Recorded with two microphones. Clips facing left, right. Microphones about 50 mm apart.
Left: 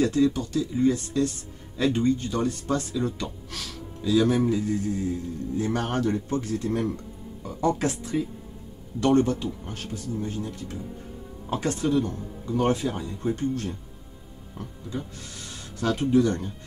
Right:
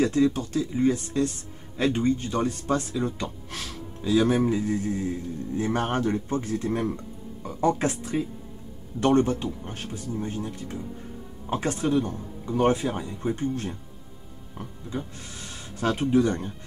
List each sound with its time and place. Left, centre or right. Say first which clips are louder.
0.0 s speech: even; right